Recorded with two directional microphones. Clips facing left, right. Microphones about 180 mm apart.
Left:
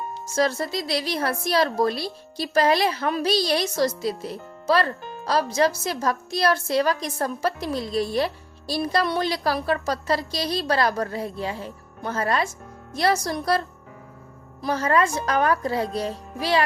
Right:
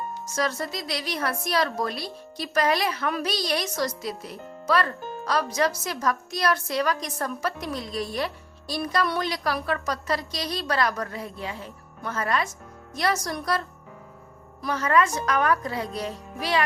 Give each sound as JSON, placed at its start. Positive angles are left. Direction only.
{"t": 0.3, "sound": "a woman's voice", "side_deg": 30}
{"t": 14.6, "sound": "a woman's voice", "side_deg": 30}